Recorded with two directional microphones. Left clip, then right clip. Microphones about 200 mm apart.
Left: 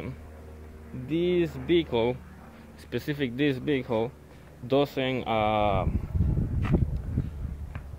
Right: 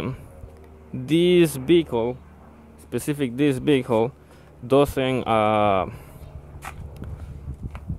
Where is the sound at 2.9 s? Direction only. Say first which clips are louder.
Right 4 dB; 35° right (ahead or behind).